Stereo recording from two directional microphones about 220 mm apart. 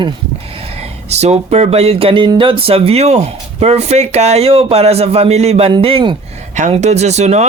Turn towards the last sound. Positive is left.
turn(degrees=-30)  # may be behind; listen again after turning